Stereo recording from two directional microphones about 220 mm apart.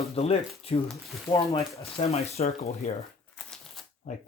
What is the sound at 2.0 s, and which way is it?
Speech, 30° left (ahead or behind).